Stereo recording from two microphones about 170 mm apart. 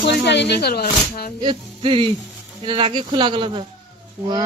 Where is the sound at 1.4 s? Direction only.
30° right (ahead or behind).